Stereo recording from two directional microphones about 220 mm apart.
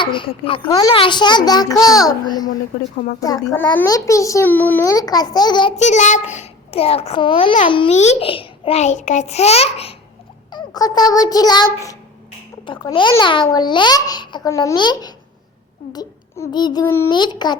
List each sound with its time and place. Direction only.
0.0 s a child's voice: 20° left (ahead or behind)
3.2 s a child's voice: 15° left (ahead or behind)